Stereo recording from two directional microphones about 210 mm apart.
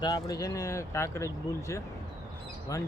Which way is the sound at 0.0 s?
20° left (ahead or behind).